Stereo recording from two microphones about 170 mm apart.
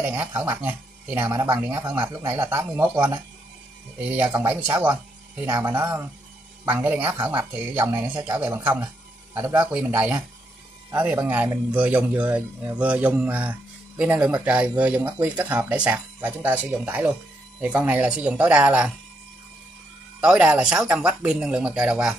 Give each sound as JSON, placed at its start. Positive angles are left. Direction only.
{"t": 0.0, "sound": "a man's voice", "side_deg": -15}
{"t": 2.3, "sound": "a man's voice", "side_deg": -15}
{"t": 4.3, "sound": "a man's voice", "side_deg": -15}
{"t": 9.6, "sound": "a man's voice", "side_deg": -10}
{"t": 20.2, "sound": "a man's voice", "side_deg": -5}